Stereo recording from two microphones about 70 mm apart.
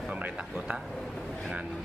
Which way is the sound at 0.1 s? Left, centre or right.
Right.